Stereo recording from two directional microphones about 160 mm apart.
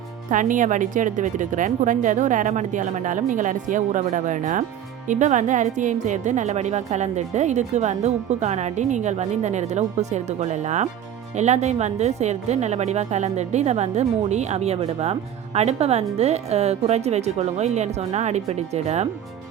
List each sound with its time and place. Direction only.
0.3 s speech: 55° right (ahead or behind)